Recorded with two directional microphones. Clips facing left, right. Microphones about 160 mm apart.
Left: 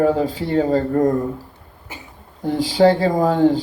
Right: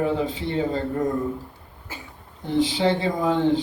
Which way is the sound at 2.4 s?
45° left (ahead or behind).